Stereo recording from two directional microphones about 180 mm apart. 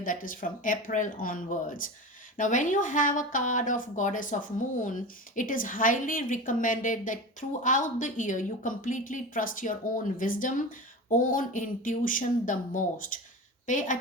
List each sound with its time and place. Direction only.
0.0 s speech: 50° left (ahead or behind)